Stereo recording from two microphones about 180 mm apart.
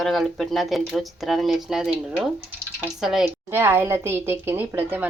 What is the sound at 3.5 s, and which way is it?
A woman's voice, 10° right (ahead or behind).